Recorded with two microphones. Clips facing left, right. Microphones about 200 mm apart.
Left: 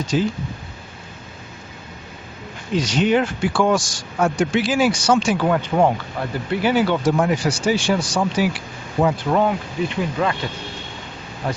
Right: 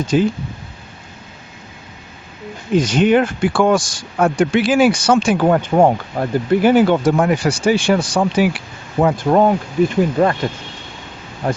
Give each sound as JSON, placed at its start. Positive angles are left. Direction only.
{"t": 0.1, "sound": "speech", "side_deg": -55}
{"t": 2.7, "sound": "speech", "side_deg": -55}
{"t": 9.4, "sound": "speech", "side_deg": -40}
{"t": 11.4, "sound": "speech", "side_deg": -45}